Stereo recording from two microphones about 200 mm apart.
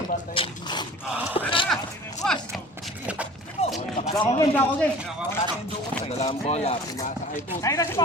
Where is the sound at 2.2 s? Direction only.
Centre (ahead or behind).